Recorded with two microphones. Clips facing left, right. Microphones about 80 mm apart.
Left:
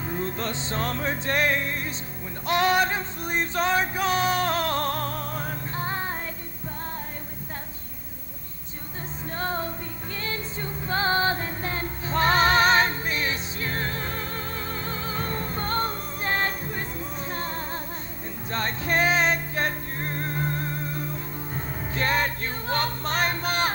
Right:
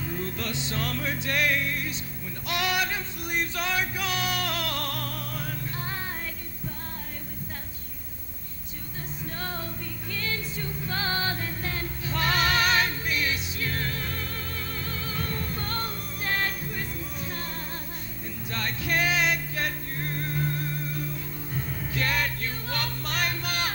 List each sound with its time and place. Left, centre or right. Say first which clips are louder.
0.0 s music: left 3 dB; left
9.4 s music: left 8 dB; left